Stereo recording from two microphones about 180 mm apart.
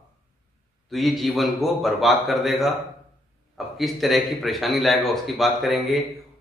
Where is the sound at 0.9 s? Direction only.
Centre (ahead or behind).